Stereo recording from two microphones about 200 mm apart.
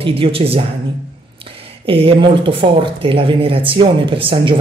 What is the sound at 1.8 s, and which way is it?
A woman's voice, 30° right (ahead or behind).